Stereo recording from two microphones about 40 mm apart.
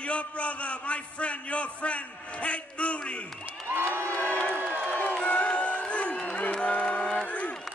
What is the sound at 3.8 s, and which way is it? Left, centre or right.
Crowd, left.